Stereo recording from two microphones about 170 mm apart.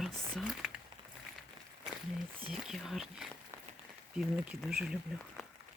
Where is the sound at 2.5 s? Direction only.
Centre (ahead or behind).